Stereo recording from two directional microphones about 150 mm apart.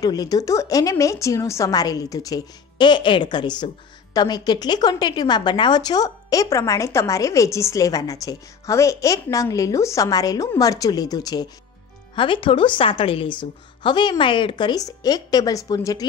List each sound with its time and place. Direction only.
0.0 s a woman's voice: 25° left (ahead or behind)